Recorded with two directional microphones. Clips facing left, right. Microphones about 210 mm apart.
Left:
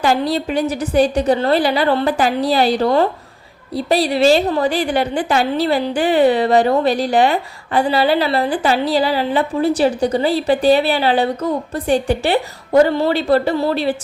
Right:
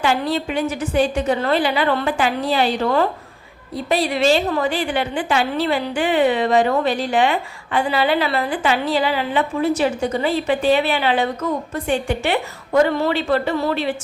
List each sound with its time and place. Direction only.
0.0 s a woman's voice: 40° left (ahead or behind)